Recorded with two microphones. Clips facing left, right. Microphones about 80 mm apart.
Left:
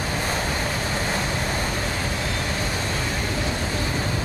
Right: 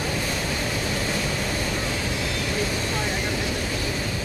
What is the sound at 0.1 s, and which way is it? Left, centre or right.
Waves, left.